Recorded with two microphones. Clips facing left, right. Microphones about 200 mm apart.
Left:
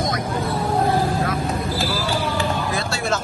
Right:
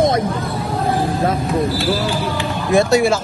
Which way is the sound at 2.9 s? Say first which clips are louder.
Right 9 dB; 15° right (ahead or behind).